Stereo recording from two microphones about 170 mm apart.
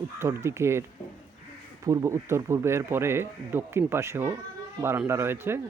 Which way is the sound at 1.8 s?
20° right (ahead or behind).